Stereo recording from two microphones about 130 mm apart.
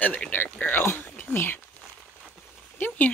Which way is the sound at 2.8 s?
15° left (ahead or behind).